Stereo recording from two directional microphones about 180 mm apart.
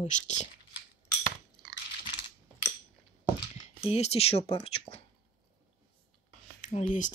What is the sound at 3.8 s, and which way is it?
Speech, 35° left (ahead or behind).